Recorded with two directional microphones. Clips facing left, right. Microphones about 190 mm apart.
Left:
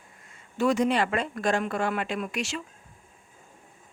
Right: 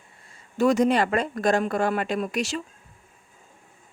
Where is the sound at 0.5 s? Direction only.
40° right (ahead or behind).